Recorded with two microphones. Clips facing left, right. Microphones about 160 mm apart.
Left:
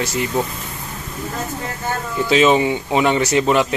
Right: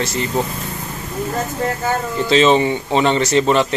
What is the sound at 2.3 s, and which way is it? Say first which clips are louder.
Speech: right 1 dB; 10° left (ahead or behind).